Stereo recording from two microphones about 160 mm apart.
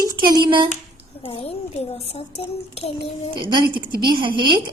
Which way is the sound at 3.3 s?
30° right (ahead or behind).